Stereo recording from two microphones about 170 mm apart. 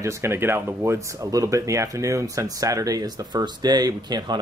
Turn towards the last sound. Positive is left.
turn(degrees=-25)  # may be behind; listen again after turning